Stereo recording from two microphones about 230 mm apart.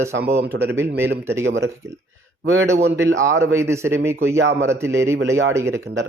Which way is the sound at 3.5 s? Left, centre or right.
Centre.